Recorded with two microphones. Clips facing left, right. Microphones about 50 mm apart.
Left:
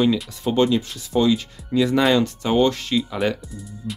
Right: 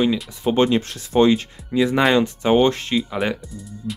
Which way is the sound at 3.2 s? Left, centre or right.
Centre.